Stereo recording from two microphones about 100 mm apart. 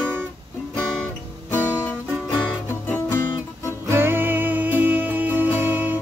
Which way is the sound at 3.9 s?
20° right (ahead or behind).